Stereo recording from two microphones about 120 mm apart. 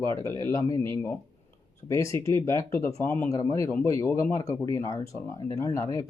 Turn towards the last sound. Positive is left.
turn(degrees=30)  # may be behind; listen again after turning